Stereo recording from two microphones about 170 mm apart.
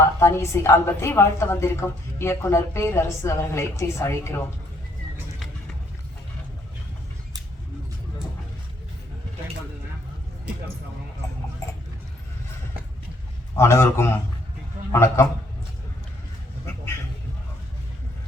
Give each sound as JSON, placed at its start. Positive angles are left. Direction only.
{"t": 0.0, "sound": "a woman's voice", "side_deg": 15}
{"t": 13.6, "sound": "a woman's voice", "side_deg": 15}